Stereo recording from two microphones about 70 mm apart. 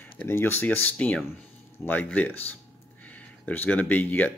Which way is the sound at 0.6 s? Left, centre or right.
Left.